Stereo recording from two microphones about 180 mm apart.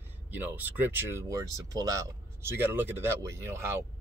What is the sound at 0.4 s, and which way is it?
Speech, 10° right (ahead or behind).